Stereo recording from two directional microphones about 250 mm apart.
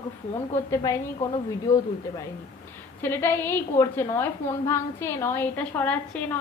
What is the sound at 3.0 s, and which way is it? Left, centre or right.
A woman's voice, centre.